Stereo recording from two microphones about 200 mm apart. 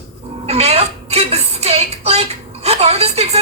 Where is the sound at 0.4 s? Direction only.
30° right (ahead or behind).